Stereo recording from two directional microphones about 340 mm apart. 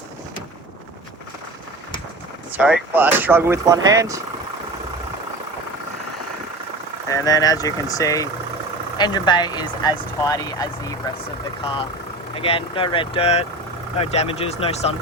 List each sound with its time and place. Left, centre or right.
2.5 s speech: centre
7.1 s speech: centre
12.4 s speech: centre